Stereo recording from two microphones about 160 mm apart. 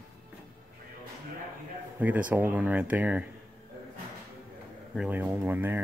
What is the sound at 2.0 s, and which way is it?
Speech, 10° right (ahead or behind).